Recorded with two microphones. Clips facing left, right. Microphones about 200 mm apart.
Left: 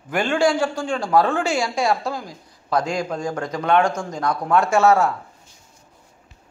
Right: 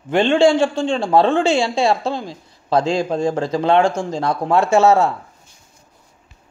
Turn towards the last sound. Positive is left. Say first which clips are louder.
# right 3 dB
turn(degrees=-25)  # may be behind; listen again after turning